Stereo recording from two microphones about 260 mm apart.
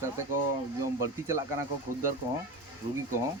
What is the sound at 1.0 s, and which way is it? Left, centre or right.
Speech, centre.